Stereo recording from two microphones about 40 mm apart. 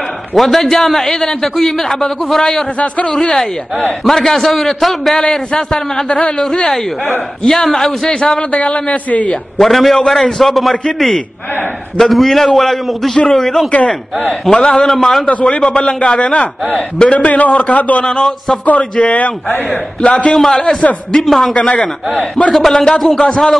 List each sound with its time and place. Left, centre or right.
0.3 s a man's voice: centre
3.1 s a man's voice: centre
5.2 s a man's voice: centre
8.1 s a man's voice: left
9.6 s a man's voice: centre
12.0 s a man's voice: centre
15.2 s a man's voice: left
18.0 s a man's voice: centre
18.8 s a man's voice: left
19.7 s a man's voice: centre
20.3 s a man's voice: centre
21.5 s a man's voice: left
22.5 s a man's voice: centre